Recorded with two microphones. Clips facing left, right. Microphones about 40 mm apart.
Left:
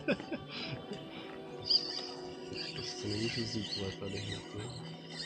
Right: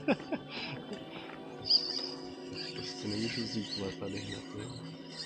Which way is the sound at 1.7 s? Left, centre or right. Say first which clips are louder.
Right 2 dB; left.